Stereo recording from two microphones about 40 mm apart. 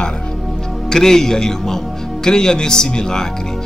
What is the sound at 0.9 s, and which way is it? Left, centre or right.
Speech, centre.